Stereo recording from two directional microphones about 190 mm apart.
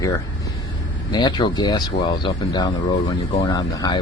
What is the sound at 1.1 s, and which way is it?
Speech, 20° left (ahead or behind).